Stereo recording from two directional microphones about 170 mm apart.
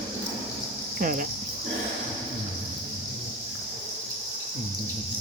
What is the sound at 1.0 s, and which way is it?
Speech, 50° right (ahead or behind).